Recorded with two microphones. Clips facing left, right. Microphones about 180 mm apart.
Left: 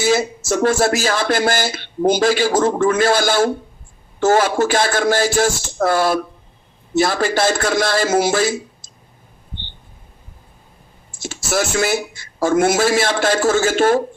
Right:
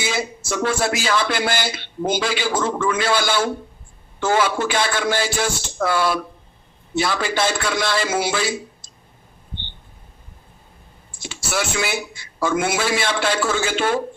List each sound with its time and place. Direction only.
0.0 s a man's voice: 40° left (ahead or behind)
11.2 s a man's voice: 45° left (ahead or behind)